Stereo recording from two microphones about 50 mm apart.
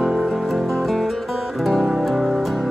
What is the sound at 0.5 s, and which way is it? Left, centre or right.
Music, centre.